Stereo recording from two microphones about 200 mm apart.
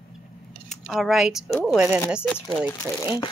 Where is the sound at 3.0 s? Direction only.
20° left (ahead or behind).